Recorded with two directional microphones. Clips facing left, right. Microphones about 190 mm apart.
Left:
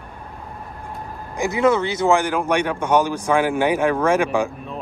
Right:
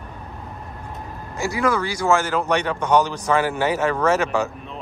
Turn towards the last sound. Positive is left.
turn(degrees=10)  # may be behind; listen again after turning